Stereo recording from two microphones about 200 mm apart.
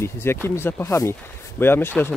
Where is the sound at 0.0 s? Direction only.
10° left (ahead or behind).